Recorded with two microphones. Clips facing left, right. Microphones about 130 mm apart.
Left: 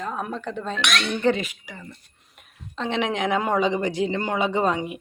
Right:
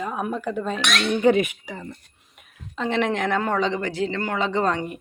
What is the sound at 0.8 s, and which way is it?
Speech, 40° right (ahead or behind).